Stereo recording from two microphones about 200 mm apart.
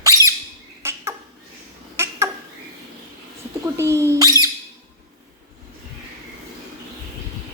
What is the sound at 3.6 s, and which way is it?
Rodents, 15° right (ahead or behind).